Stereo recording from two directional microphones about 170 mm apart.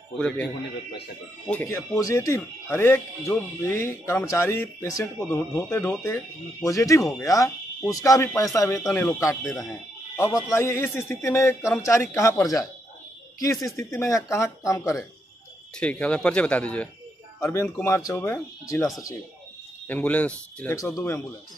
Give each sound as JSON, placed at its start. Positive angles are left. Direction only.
{"t": 1.5, "sound": "speech", "side_deg": 15}
{"t": 9.5, "sound": "speech", "side_deg": 0}
{"t": 10.1, "sound": "speech", "side_deg": 15}
{"t": 15.8, "sound": "speech", "side_deg": 5}
{"t": 19.9, "sound": "speech", "side_deg": 10}
{"t": 20.7, "sound": "speech", "side_deg": 20}